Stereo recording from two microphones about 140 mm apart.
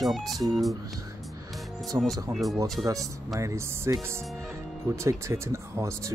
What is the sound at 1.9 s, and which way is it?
Speech, 25° right (ahead or behind).